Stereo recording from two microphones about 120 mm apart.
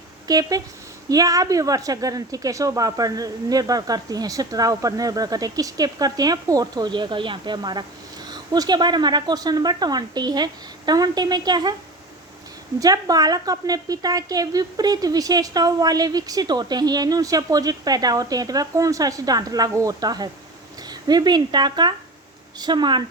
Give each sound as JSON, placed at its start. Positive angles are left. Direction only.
{"t": 0.3, "sound": "a woman's voice", "side_deg": -30}
{"t": 12.8, "sound": "a woman's voice", "side_deg": -30}